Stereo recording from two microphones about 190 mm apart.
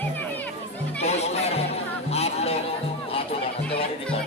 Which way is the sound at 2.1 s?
35° left (ahead or behind).